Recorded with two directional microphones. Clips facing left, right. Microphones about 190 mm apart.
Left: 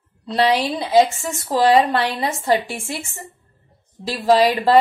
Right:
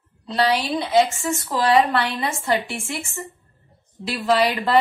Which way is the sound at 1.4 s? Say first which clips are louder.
Left 3 dB; 35° left (ahead or behind).